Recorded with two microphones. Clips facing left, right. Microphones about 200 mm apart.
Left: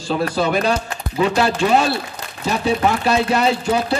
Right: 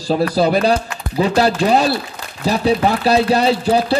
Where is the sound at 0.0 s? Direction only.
35° right (ahead or behind).